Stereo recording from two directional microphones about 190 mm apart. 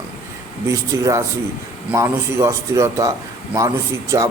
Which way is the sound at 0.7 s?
15° right (ahead or behind).